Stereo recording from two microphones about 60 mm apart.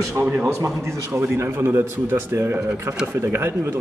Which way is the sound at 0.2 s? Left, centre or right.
Right.